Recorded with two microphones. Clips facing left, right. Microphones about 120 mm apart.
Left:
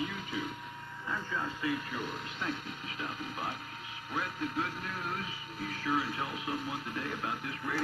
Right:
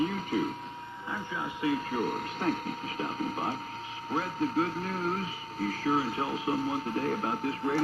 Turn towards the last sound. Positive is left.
turn(degrees=-35)  # may be behind; listen again after turning